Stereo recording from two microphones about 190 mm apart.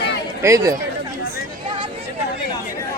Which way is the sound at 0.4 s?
15° right (ahead or behind).